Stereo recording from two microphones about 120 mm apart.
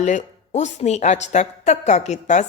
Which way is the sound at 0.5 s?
75° left (ahead or behind).